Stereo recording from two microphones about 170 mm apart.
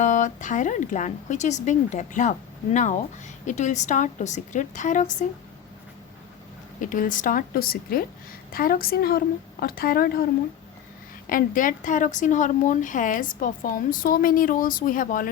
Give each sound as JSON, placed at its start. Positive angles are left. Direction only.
{"t": 0.0, "sound": "speech", "side_deg": 45}
{"t": 3.4, "sound": "speech", "side_deg": 45}
{"t": 6.9, "sound": "a woman's voice", "side_deg": 50}
{"t": 11.3, "sound": "speech", "side_deg": 50}